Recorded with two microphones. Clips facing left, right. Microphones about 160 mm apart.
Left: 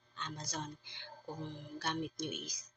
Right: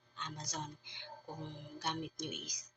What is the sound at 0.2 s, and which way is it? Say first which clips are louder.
Speech: left 1 dB; 15° right (ahead or behind).